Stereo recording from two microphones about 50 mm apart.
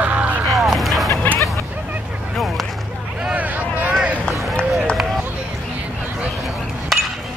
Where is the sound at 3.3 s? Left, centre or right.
Right.